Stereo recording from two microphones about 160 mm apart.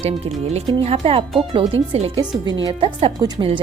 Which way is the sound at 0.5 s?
40° right (ahead or behind).